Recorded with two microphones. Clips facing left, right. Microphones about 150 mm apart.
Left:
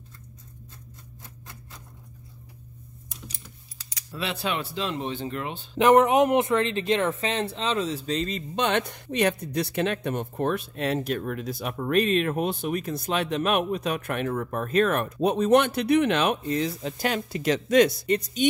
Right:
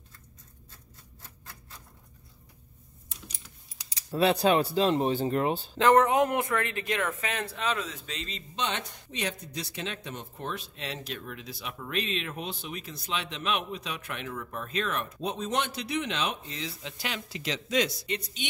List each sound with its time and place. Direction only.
3.9 s speech: 40° right (ahead or behind)
5.8 s speech: 15° left (ahead or behind); by 18.5 s 45° left (ahead or behind)